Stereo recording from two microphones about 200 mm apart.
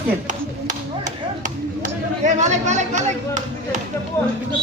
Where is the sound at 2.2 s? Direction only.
35° right (ahead or behind).